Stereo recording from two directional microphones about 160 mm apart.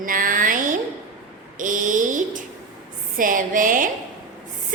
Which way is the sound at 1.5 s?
55° right (ahead or behind).